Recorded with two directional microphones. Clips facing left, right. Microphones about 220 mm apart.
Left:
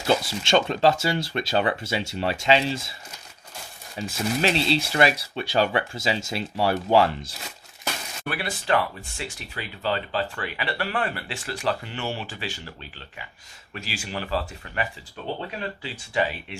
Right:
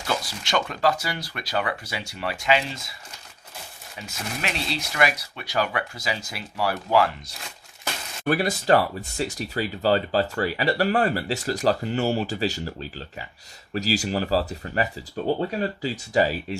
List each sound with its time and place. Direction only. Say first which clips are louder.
0.1 s speech: left 5 dB; 25° left (ahead or behind)
3.9 s speech: left 8 dB; 30° left (ahead or behind)
8.3 s speech: right 6 dB; 40° right (ahead or behind)